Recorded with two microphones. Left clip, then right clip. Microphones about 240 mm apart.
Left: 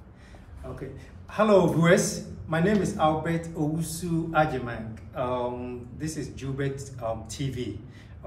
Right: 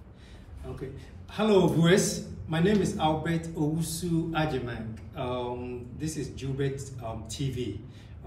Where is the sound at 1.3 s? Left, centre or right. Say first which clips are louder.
Left 3 dB; centre.